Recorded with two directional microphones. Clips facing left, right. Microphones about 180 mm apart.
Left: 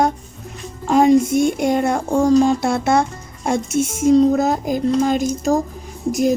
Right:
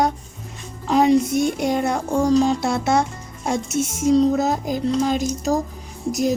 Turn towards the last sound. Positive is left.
turn(degrees=50)  # may be behind; listen again after turning